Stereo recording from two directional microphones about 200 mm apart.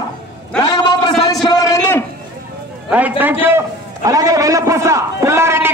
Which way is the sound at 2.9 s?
10° right (ahead or behind).